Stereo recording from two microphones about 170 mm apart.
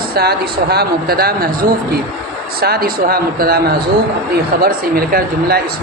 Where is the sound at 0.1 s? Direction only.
70° right (ahead or behind).